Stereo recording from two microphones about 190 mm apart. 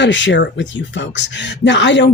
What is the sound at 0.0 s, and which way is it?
Speech, 70° left (ahead or behind).